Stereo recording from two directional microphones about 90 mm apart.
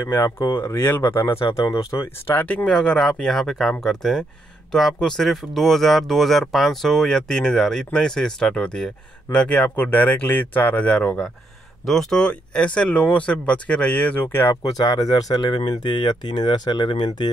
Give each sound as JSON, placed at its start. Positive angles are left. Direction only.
{"t": 0.1, "sound": "speech", "side_deg": 30}
{"t": 2.2, "sound": "speech", "side_deg": 20}
{"t": 14.5, "sound": "speech", "side_deg": 45}